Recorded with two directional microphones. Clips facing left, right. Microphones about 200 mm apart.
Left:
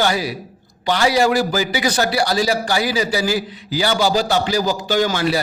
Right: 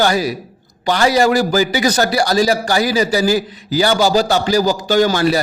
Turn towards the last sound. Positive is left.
turn(degrees=-40)  # may be behind; listen again after turning